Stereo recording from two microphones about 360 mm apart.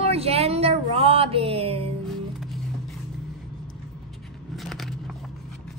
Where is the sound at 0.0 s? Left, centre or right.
Centre.